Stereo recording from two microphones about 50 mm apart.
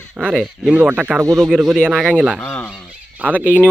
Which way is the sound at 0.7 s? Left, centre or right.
Right.